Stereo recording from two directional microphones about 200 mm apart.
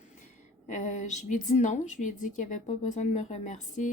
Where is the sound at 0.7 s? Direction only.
40° left (ahead or behind).